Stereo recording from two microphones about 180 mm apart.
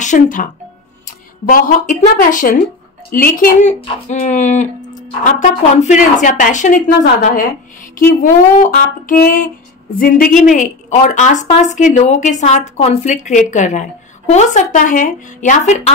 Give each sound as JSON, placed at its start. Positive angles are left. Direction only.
{"t": 0.0, "sound": "speech", "side_deg": 45}